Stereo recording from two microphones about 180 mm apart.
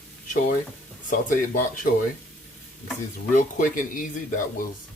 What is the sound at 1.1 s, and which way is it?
Speech, 45° left (ahead or behind).